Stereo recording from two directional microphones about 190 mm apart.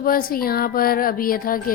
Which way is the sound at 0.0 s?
50° left (ahead or behind).